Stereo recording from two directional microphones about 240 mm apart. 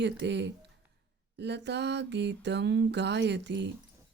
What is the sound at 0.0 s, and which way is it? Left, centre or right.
Speech, right.